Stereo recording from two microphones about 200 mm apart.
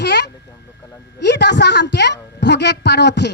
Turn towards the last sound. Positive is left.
turn(degrees=60)  # may be behind; listen again after turning